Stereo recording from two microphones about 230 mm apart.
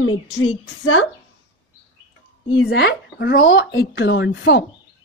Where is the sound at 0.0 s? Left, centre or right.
Left.